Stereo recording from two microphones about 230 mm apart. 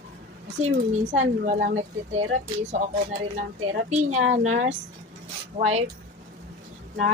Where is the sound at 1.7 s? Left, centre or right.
Right.